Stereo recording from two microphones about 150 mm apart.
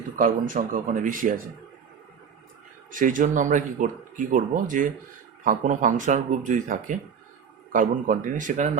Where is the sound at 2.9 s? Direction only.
60° right (ahead or behind).